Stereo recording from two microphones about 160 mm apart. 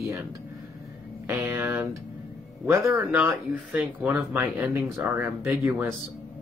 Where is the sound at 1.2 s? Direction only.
15° right (ahead or behind).